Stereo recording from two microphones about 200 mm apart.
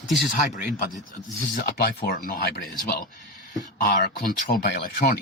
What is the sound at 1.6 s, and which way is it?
Speech, 50° left (ahead or behind).